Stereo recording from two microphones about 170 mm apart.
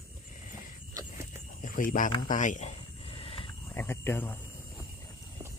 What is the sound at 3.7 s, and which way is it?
Speech, 15° left (ahead or behind).